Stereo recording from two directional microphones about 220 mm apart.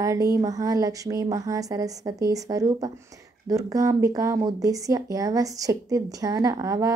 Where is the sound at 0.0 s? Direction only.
15° right (ahead or behind).